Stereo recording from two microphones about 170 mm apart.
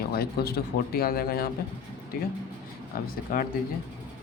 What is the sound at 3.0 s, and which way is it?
Speech, 60° left (ahead or behind).